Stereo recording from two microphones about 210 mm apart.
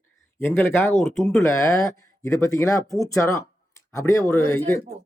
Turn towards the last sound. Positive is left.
turn(degrees=15)  # may be behind; listen again after turning